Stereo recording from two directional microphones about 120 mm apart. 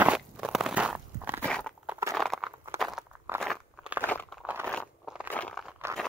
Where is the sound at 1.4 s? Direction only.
10° left (ahead or behind).